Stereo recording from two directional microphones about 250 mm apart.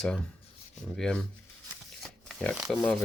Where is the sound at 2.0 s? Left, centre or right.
Centre.